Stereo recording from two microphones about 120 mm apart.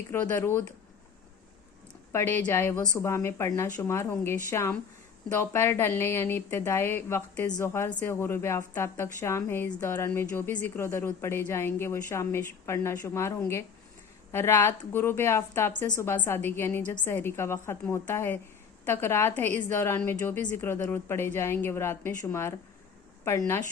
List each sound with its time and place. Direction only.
0.1 s a woman's voice: 20° left (ahead or behind)
2.1 s a woman's voice: 15° left (ahead or behind)
7.9 s a woman's voice: 10° left (ahead or behind)